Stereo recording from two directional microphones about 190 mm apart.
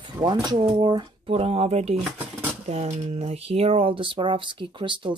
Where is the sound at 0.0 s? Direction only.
20° right (ahead or behind).